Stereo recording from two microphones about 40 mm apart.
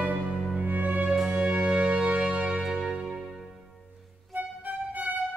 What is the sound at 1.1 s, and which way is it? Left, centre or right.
Music, centre.